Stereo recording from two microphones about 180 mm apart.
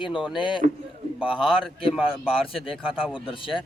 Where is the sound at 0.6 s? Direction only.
50° right (ahead or behind).